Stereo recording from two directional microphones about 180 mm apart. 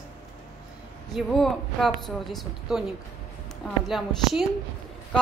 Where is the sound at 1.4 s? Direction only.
Centre (ahead or behind).